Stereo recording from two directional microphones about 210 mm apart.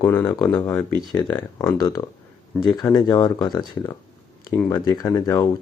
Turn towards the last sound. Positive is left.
turn(degrees=20)  # may be behind; listen again after turning